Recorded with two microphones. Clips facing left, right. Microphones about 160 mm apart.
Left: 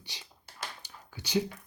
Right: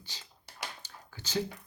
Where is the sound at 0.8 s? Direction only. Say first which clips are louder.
Left 2 dB; 15° left (ahead or behind).